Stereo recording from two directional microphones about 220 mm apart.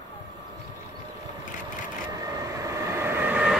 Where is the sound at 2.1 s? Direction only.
15° right (ahead or behind).